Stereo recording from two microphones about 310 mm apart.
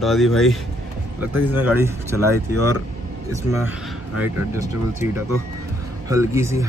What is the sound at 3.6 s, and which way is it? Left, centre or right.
Speech, centre.